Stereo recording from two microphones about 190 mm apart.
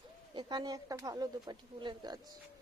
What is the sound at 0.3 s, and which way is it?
Speech, 20° right (ahead or behind).